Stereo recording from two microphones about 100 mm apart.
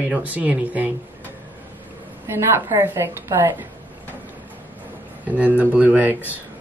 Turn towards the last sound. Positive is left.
turn(degrees=-15)  # may be behind; listen again after turning